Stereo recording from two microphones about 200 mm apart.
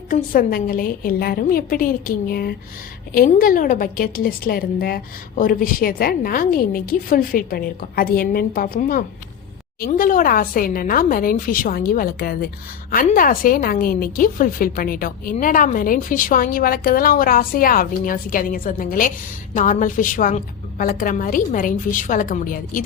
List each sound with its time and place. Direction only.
0.1 s a woman's voice: 45° left (ahead or behind)